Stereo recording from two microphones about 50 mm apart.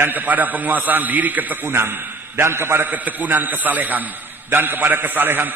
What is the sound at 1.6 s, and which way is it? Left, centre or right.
A man's voice, right.